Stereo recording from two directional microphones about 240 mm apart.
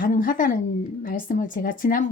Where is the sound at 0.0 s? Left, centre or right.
Left.